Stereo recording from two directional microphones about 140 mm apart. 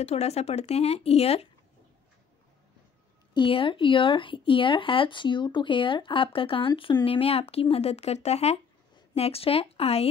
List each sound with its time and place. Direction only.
0.0 s speech: 50° left (ahead or behind)
3.3 s speech: 40° left (ahead or behind)